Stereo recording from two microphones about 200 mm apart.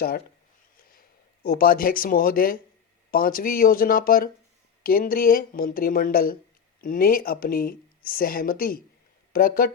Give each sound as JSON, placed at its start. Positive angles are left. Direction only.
{"t": 0.9, "sound": "speech", "side_deg": 45}